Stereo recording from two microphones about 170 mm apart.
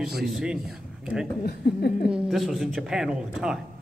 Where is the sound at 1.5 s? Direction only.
70° left (ahead or behind).